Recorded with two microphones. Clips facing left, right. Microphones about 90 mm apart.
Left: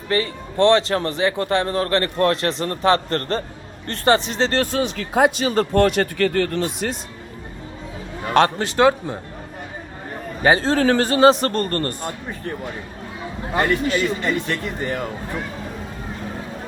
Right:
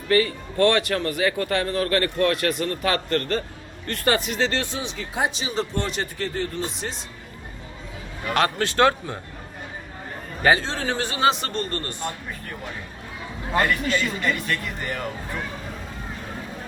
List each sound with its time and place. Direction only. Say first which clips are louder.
0.1 s a man's voice: right 2 dB; 30° left (ahead or behind); by 6.9 s 75° left (ahead or behind)
8.2 s a man's voice: left 5 dB; 35° left (ahead or behind)
10.6 s speech: left 9 dB; 50° left (ahead or behind)
13.6 s a man's voice: left 3 dB; 25° left (ahead or behind)